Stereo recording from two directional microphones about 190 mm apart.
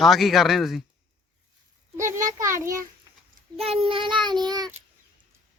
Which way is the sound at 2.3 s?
15° right (ahead or behind).